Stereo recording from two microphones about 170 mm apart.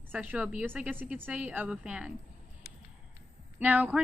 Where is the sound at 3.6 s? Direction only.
10° right (ahead or behind).